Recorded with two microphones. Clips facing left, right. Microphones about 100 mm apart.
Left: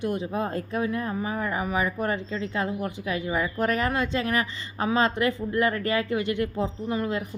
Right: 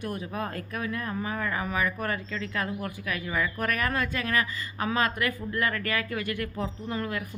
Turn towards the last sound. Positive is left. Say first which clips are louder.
# left 4 dB
turn(degrees=20)  # may be behind; listen again after turning